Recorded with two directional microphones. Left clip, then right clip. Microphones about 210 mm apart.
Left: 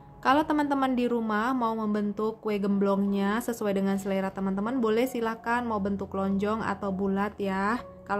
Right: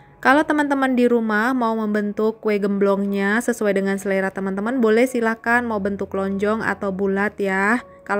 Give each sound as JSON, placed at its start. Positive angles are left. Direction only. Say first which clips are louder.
{"t": 0.2, "sound": "a woman's voice", "louder": "right 8 dB", "side_deg": -25}